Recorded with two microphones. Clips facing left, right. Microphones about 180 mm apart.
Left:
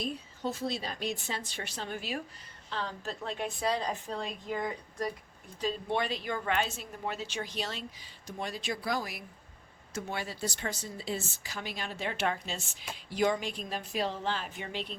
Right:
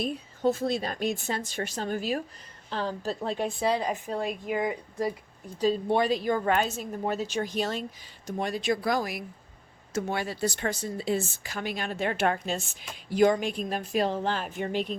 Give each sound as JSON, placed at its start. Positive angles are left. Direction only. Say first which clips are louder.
{"t": 0.0, "sound": "a woman's voice", "louder": "right 8 dB", "side_deg": -50}
{"t": 5.5, "sound": "a woman's voice", "louder": "right 7 dB", "side_deg": -40}
{"t": 9.9, "sound": "a woman's voice", "louder": "right 7 dB", "side_deg": -80}